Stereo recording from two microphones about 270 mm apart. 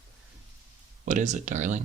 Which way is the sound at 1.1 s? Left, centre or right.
Right.